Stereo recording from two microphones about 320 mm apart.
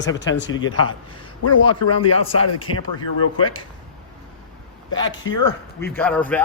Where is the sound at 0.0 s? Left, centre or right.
Left.